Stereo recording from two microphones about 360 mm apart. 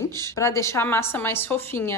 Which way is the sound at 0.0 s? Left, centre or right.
Centre.